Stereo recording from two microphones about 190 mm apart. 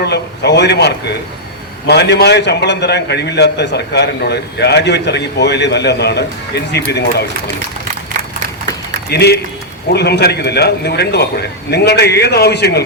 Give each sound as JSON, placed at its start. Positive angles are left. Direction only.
{"t": 0.0, "sound": "a man's voice", "side_deg": 65}
{"t": 9.0, "sound": "a man's voice", "side_deg": 60}